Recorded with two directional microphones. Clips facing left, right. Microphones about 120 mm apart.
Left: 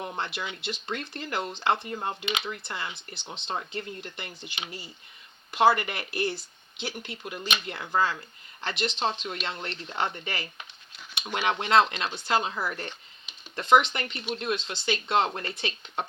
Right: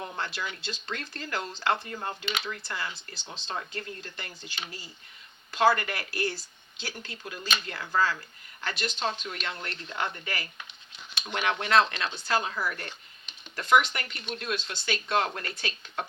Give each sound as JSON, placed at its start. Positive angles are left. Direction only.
{"t": 0.0, "sound": "speech", "side_deg": 20}
{"t": 11.1, "sound": "a sound", "side_deg": 15}
{"t": 11.3, "sound": "speech", "side_deg": 25}